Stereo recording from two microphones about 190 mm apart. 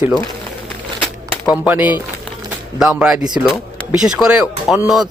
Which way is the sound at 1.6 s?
10° right (ahead or behind).